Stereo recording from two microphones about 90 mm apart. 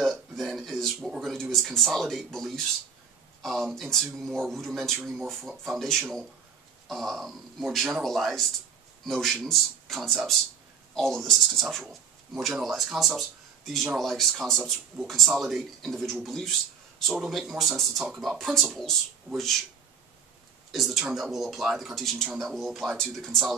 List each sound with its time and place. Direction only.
0.0 s a man's voice: centre (ahead or behind)
20.7 s a man's voice: centre (ahead or behind)